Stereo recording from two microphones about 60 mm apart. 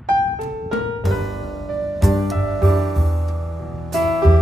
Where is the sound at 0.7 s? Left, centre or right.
Centre.